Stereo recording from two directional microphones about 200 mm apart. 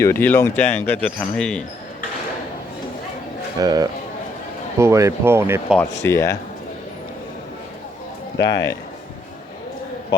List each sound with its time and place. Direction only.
0.0 s speech: 10° left (ahead or behind)
3.6 s speech: 20° right (ahead or behind)
6.1 s speech: 10° left (ahead or behind)
8.4 s speech: 20° left (ahead or behind)